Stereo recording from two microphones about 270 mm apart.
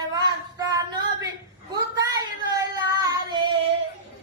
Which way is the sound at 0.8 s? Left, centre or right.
Centre.